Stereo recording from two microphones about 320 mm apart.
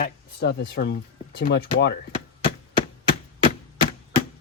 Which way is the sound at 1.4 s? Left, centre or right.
Left.